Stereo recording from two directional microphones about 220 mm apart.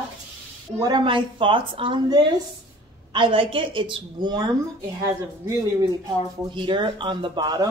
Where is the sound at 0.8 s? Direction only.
20° right (ahead or behind).